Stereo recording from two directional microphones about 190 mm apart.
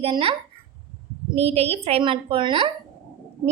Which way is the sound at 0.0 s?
30° right (ahead or behind).